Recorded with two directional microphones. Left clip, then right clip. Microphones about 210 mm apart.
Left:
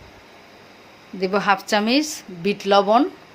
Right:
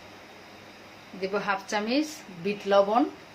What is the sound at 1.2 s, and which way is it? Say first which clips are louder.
Speech: left 9 dB; 50° left (ahead or behind).